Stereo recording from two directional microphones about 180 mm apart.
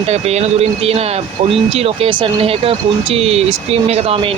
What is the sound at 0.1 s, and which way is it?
Speech, 35° right (ahead or behind).